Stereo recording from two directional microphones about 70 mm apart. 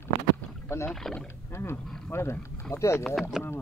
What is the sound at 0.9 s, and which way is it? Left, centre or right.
Speech, centre.